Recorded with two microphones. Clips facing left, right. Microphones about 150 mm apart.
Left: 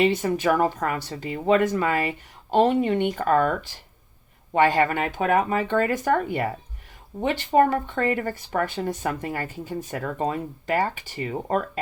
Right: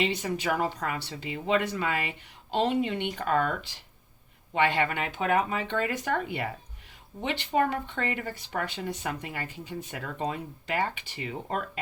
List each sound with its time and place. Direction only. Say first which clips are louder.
0.0 s speech: left 8 dB; 50° left (ahead or behind)